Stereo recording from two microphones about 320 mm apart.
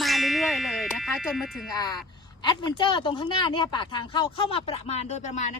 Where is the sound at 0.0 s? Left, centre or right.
Centre.